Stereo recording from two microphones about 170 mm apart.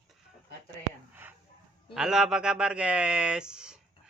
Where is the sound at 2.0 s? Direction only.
5° right (ahead or behind).